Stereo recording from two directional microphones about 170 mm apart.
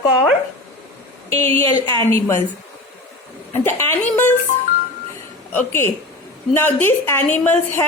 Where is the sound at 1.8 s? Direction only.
20° left (ahead or behind).